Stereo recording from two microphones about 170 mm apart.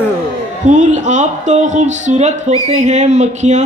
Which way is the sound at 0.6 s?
45° right (ahead or behind).